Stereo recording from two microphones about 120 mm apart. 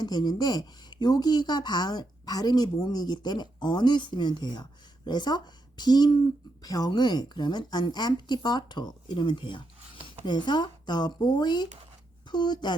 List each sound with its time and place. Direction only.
0.0 s speech: 35° left (ahead or behind)